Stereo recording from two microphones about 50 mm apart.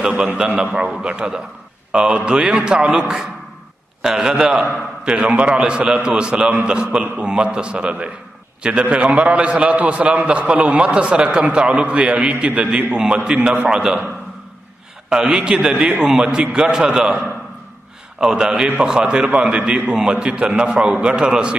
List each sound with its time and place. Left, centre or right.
0.1 s a man's voice: right
0.7 s a man's voice: centre
15.3 s a man's voice: centre
18.2 s a man's voice: centre